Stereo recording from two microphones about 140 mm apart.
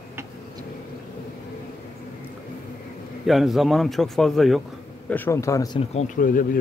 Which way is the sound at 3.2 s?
Centre (ahead or behind).